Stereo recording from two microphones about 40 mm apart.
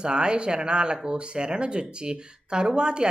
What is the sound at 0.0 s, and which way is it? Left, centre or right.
Speech, right.